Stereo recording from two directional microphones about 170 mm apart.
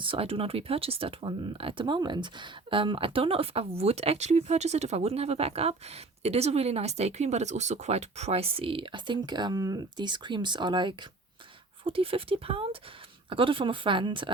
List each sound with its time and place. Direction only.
0.0 s speech: 35° right (ahead or behind)